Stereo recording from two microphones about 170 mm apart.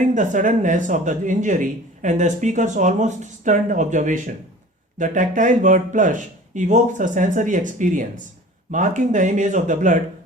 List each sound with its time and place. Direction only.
0.0 s speech: 45° right (ahead or behind)